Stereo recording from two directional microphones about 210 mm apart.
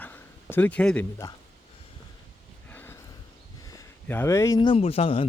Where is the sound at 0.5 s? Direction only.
5° left (ahead or behind).